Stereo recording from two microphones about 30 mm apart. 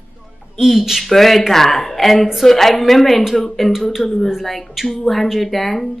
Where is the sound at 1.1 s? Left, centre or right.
Centre.